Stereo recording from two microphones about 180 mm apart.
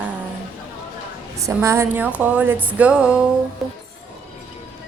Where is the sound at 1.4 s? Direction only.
15° right (ahead or behind).